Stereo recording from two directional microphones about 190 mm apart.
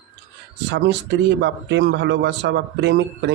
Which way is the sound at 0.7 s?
65° right (ahead or behind).